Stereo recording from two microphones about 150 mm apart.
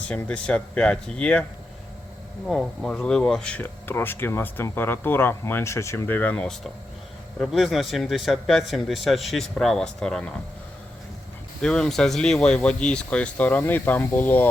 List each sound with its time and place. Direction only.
0.1 s speech: 5° left (ahead or behind)
2.5 s a man's voice: 5° left (ahead or behind)
11.6 s speech: 5° left (ahead or behind)